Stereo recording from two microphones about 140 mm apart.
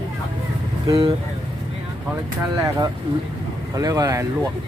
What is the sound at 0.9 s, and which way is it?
Speech, 35° right (ahead or behind).